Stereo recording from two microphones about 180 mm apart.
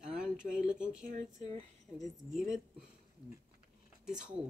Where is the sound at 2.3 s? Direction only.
Centre (ahead or behind).